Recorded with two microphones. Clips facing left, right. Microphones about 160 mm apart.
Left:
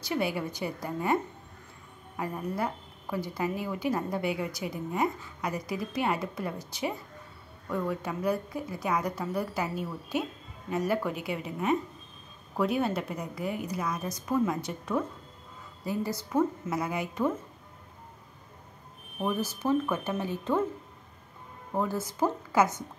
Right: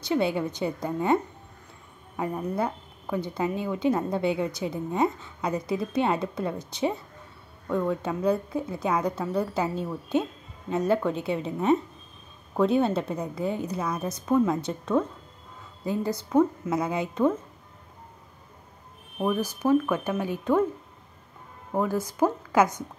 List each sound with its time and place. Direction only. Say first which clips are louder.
0.0 s speech: right 5 dB; 25° right (ahead or behind)
19.3 s speech: right 5 dB; 15° right (ahead or behind)
21.7 s speech: right 4 dB; 15° right (ahead or behind)